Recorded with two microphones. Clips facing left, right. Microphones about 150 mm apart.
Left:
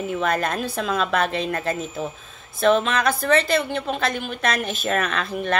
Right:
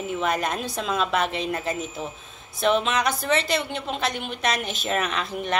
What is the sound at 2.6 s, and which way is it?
A woman's voice, 20° right (ahead or behind).